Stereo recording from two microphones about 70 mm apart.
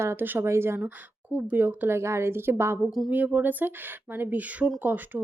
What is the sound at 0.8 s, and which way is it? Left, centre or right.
Speech, right.